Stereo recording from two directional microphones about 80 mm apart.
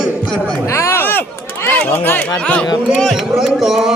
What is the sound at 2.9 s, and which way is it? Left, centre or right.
A man's voice, centre.